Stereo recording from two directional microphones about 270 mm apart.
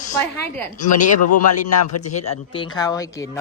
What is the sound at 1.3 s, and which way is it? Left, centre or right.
Speech, left.